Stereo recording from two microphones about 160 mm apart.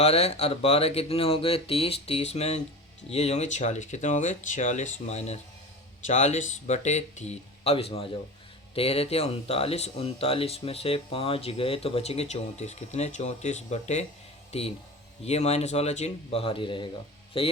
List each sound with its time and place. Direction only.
0.0 s speech: 40° left (ahead or behind)